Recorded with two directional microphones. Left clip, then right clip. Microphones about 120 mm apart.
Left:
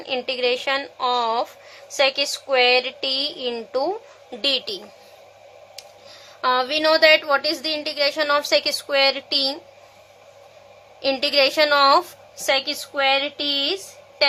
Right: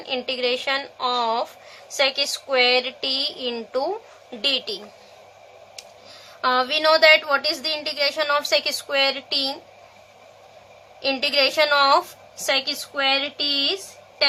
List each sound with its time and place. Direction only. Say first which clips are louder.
0.0 s a woman's voice: left 2 dB; 35° left (ahead or behind)
4.4 s a woman's voice: left 1 dB; 45° left (ahead or behind)
6.4 s a woman's voice: even; 35° left (ahead or behind); by 9.6 s 50° left (ahead or behind)
11.0 s a woman's voice: left 2 dB; 45° left (ahead or behind)